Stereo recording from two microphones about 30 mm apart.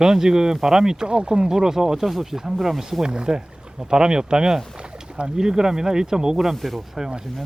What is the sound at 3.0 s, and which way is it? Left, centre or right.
Speech, right.